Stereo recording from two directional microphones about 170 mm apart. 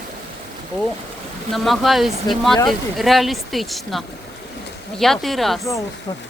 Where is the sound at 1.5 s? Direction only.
Centre (ahead or behind).